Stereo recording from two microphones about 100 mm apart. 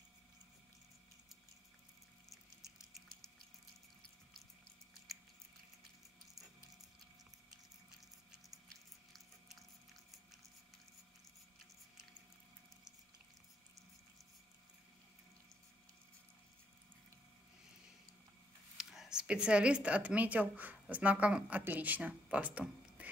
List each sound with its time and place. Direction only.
8.6 s biting: centre (ahead or behind)
18.8 s speech: 5° right (ahead or behind)